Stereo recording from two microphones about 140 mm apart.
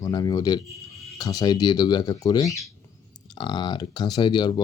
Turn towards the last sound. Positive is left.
turn(degrees=30)  # may be behind; listen again after turning